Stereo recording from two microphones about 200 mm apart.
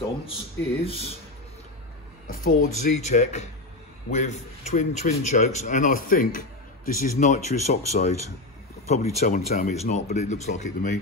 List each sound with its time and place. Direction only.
0.8 s speech: 30° left (ahead or behind)
2.2 s a man's voice: 45° left (ahead or behind)
9.5 s speech: 45° left (ahead or behind)
9.8 s a man's voice: 35° left (ahead or behind)